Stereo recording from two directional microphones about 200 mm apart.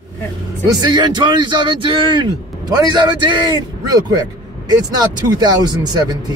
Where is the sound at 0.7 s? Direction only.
20° right (ahead or behind).